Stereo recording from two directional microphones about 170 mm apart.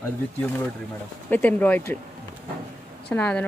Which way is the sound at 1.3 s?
10° left (ahead or behind).